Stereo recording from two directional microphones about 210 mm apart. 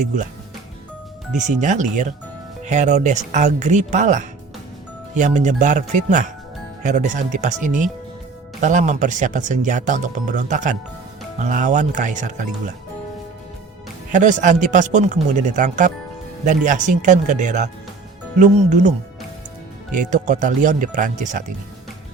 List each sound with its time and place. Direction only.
1.4 s speech: 35° right (ahead or behind)
14.1 s speech: 35° right (ahead or behind)